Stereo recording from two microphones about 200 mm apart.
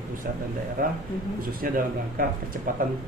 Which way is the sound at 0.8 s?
45° right (ahead or behind).